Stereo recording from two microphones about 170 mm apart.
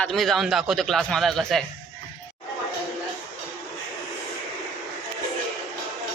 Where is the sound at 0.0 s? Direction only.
Centre (ahead or behind).